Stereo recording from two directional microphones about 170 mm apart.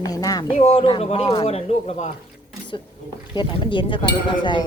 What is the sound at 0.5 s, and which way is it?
Speech, 35° left (ahead or behind).